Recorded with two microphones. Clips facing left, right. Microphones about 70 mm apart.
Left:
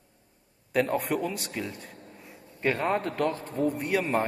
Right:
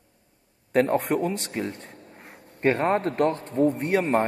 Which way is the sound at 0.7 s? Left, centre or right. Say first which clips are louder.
Right 4 dB; right.